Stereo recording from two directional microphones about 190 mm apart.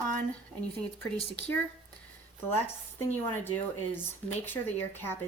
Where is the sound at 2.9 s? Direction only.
10° left (ahead or behind).